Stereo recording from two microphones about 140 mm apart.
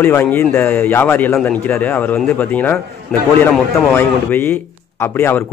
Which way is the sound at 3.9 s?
15° left (ahead or behind).